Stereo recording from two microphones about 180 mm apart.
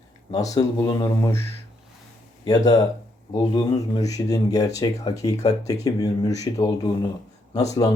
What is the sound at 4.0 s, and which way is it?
Speech, 20° left (ahead or behind).